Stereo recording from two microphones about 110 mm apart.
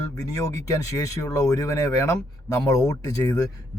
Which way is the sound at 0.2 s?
30° left (ahead or behind).